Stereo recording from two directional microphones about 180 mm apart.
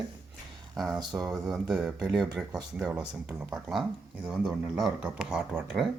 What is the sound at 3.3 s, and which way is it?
Speech, 15° right (ahead or behind).